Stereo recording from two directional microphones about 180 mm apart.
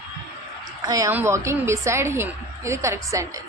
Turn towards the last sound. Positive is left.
turn(degrees=-15)  # may be behind; listen again after turning